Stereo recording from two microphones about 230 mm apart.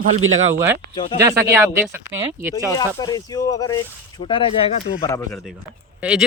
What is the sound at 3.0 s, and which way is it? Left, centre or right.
Speech, centre.